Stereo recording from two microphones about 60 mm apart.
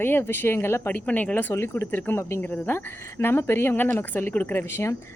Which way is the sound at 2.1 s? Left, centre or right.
Left.